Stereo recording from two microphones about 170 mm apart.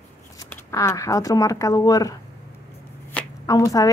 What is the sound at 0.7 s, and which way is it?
Speech, 20° left (ahead or behind).